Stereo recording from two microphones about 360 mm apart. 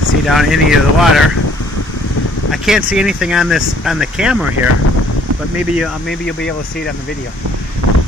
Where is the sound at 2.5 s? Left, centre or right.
Centre.